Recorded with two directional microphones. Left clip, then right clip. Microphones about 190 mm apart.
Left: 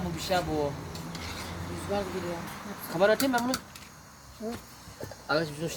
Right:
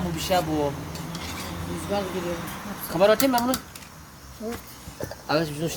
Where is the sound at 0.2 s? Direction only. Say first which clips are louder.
Right 5 dB; 15° right (ahead or behind).